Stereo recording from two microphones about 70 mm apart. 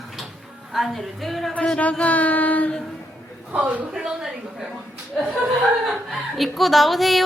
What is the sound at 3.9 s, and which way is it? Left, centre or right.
Speech, centre.